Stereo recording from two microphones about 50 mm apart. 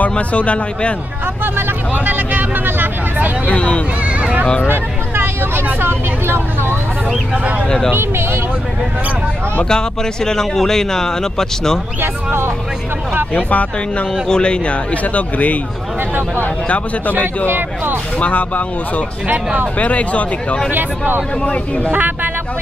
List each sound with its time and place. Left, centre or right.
0.0 s speech: left
2.0 s speech: right
3.4 s speech: left
4.6 s speech: right
7.6 s speech: centre
7.9 s speech: right
9.7 s speech: centre
12.0 s speech: right
13.3 s speech: left
17.5 s speech: right
18.2 s speech: left
19.2 s speech: right
19.8 s speech: left
21.9 s speech: right